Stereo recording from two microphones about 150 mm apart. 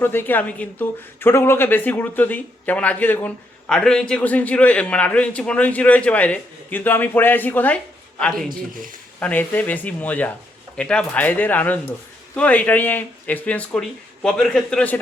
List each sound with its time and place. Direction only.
0.0 s a woman's voice: 15° left (ahead or behind)
8.7 s speech: 65° right (ahead or behind)
9.2 s a woman's voice: 10° left (ahead or behind)